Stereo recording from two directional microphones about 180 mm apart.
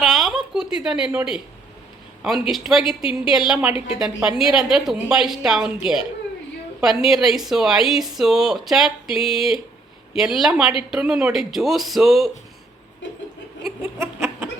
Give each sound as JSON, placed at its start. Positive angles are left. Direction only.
{"t": 0.0, "sound": "a woman's voice", "side_deg": 0}
{"t": 2.5, "sound": "speech", "side_deg": 0}
{"t": 14.0, "sound": "a sound", "side_deg": -10}